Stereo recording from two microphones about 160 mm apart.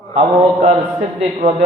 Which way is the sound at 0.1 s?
35° right (ahead or behind).